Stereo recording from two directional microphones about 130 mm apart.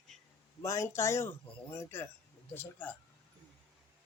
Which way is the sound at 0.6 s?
25° left (ahead or behind).